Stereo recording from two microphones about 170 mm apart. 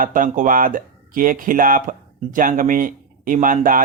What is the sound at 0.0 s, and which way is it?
Speech, 50° right (ahead or behind).